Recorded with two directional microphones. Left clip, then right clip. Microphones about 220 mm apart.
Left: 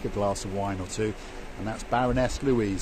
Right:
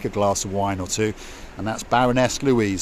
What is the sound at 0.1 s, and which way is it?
Speech, 40° right (ahead or behind).